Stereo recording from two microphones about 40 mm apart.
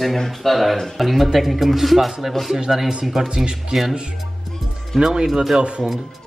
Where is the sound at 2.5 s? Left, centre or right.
Centre.